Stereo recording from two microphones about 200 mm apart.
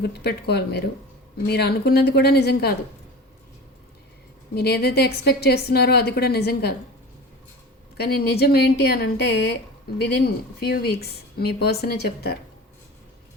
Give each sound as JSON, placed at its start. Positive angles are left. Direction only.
{"t": 0.0, "sound": "a woman's voice", "side_deg": 55}
{"t": 4.5, "sound": "a woman's voice", "side_deg": 55}
{"t": 7.9, "sound": "a woman's voice", "side_deg": 55}
{"t": 10.6, "sound": "a woman's voice", "side_deg": 50}